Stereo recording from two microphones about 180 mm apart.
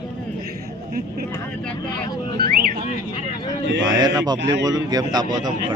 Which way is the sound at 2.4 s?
55° right (ahead or behind).